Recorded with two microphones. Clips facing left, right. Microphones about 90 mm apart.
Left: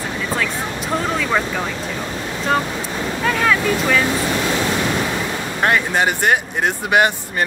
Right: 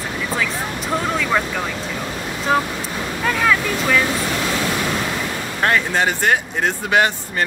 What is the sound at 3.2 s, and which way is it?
Speech, centre (ahead or behind).